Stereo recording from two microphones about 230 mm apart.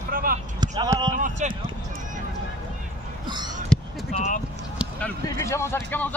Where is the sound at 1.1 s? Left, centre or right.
Right.